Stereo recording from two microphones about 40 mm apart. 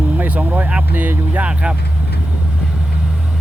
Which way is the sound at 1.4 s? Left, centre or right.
Right.